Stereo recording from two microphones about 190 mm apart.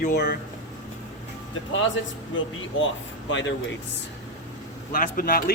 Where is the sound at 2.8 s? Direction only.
80° left.